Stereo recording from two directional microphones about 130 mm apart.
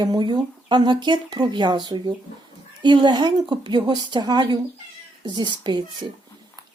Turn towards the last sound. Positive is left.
turn(degrees=-35)  # may be behind; listen again after turning